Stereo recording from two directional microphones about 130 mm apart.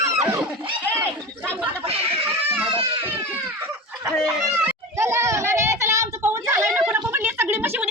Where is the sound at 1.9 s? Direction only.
50° right (ahead or behind).